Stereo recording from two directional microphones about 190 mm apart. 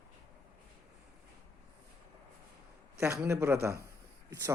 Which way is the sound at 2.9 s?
15° right (ahead or behind).